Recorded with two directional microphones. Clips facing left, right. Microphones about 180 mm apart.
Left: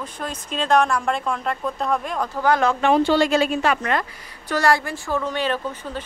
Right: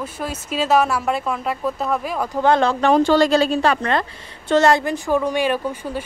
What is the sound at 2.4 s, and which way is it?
Speech, 30° right (ahead or behind).